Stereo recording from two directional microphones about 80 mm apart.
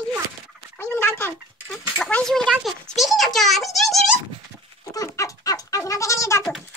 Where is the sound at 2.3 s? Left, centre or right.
Centre.